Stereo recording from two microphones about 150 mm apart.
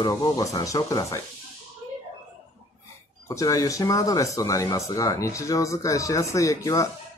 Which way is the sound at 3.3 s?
20° left (ahead or behind).